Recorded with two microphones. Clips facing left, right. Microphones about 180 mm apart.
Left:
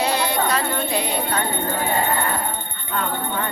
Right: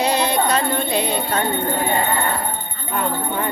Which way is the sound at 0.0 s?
20° right (ahead or behind).